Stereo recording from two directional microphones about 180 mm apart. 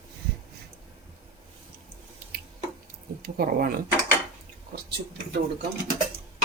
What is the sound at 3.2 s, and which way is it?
Speech, 55° right (ahead or behind).